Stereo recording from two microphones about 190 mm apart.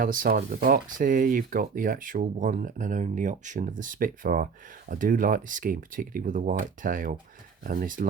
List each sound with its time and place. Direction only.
0.0 s speech: 50° right (ahead or behind)